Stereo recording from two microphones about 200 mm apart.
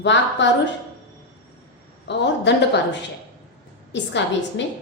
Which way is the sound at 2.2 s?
60° left (ahead or behind).